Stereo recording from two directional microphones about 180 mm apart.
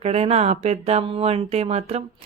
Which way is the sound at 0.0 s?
35° right (ahead or behind).